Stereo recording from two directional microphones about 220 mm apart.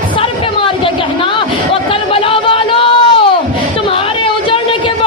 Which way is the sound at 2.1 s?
25° left (ahead or behind).